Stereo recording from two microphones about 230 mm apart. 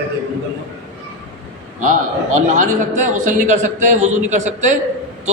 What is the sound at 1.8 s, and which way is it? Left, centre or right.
A man's voice, right.